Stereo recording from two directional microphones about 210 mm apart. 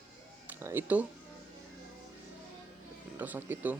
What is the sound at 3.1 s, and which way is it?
Speech, 10° right (ahead or behind).